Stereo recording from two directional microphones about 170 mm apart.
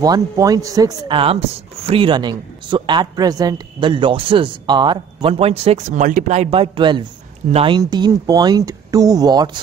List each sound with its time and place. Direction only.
0.0 s a man's voice: 20° right (ahead or behind)